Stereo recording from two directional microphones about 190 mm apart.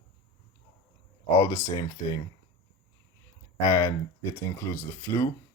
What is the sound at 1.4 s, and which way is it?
Speech, 15° left (ahead or behind).